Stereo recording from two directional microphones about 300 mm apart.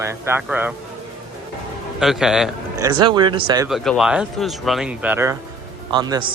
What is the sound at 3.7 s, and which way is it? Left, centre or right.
A man's voice, centre.